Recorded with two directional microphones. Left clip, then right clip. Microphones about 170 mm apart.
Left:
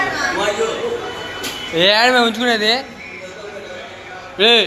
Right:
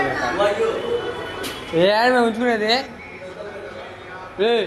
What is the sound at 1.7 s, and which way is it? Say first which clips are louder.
Speech: left 3 dB; 30° right (ahead or behind).